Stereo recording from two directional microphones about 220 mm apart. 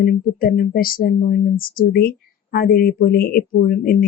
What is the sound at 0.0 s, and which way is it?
Speech, 40° left (ahead or behind).